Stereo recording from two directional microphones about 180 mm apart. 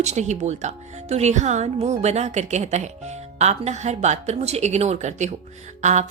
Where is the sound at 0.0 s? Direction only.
40° right (ahead or behind).